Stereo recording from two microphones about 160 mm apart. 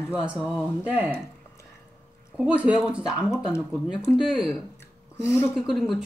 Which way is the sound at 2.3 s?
10° right (ahead or behind).